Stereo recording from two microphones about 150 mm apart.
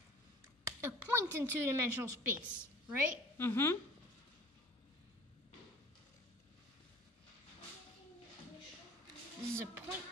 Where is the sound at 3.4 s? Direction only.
15° left (ahead or behind).